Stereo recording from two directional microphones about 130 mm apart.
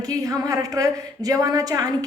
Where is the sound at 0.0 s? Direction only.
25° right (ahead or behind).